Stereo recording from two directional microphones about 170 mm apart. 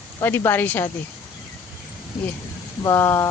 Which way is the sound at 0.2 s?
15° left (ahead or behind).